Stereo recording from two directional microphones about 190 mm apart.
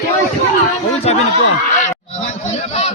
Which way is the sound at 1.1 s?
35° left (ahead or behind).